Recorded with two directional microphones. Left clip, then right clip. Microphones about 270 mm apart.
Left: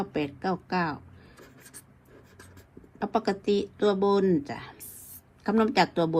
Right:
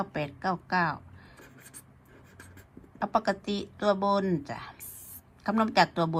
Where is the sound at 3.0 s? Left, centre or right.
Right.